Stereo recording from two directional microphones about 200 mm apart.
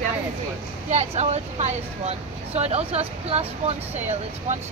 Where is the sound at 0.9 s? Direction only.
35° right (ahead or behind).